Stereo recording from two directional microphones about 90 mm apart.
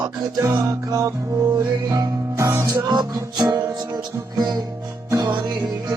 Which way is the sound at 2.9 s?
50° right (ahead or behind).